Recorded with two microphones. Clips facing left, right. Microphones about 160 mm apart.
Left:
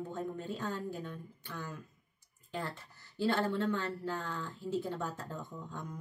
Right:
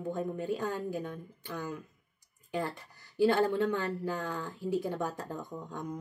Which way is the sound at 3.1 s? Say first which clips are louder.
Right 6 dB; 15° right (ahead or behind).